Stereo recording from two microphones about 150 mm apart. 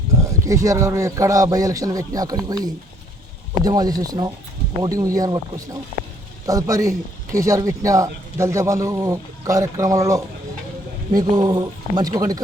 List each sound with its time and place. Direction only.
0.4 s a man's voice: 20° right (ahead or behind)
3.6 s a man's voice: 25° right (ahead or behind)